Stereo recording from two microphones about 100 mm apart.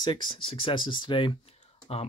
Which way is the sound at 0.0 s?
50° left (ahead or behind).